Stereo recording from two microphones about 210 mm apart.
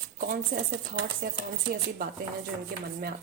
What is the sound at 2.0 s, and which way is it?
Speech, 45° right (ahead or behind).